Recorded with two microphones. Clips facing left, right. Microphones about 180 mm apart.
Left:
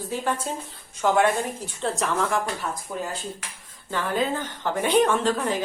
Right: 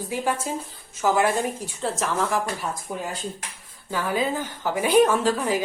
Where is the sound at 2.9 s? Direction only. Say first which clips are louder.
Even; 15° right (ahead or behind).